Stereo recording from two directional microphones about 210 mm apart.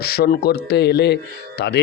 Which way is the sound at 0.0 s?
50° left (ahead or behind).